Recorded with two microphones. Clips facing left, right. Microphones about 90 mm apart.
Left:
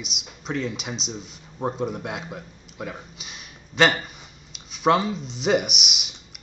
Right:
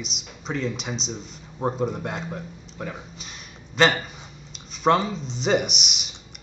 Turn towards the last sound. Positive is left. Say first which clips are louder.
# right 1 dB
turn(degrees=5)  # may be behind; listen again after turning